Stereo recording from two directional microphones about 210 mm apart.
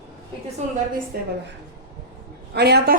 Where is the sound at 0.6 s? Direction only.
35° right (ahead or behind).